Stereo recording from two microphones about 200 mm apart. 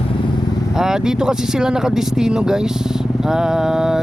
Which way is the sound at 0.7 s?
5° right (ahead or behind).